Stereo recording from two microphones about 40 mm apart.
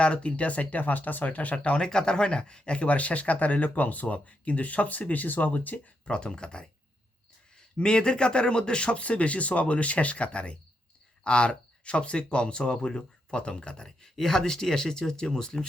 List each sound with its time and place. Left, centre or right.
0.0 s speech: left
1.8 s speech: left
6.1 s speech: left
7.8 s speech: left
13.8 s speech: centre